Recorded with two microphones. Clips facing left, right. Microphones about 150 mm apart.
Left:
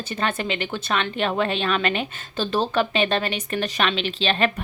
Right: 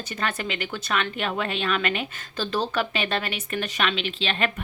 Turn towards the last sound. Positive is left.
turn(degrees=35)  # may be behind; listen again after turning